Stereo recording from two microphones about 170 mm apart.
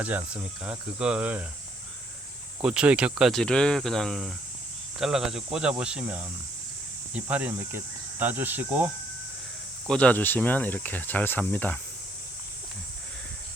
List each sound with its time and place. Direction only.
0.0 s speech: 10° right (ahead or behind)
2.6 s speech: 5° right (ahead or behind)
9.8 s speech: 5° left (ahead or behind)